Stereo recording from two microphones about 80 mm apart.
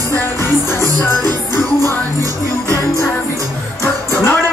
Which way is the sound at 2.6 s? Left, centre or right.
Left.